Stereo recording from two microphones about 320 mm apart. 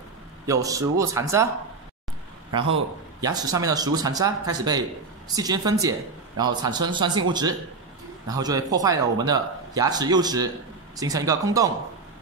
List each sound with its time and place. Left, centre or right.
0.5 s speech: centre
3.2 s speech: centre